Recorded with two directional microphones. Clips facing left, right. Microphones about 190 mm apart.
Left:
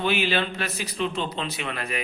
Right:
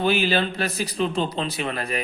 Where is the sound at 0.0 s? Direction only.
40° right (ahead or behind).